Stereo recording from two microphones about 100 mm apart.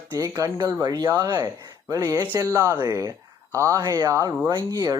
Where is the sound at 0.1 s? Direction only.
30° right (ahead or behind).